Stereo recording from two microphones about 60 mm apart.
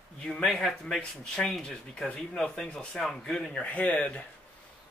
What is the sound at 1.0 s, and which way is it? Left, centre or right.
Speech, centre.